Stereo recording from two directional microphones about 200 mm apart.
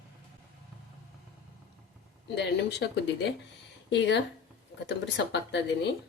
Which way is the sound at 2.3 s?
60° left (ahead or behind).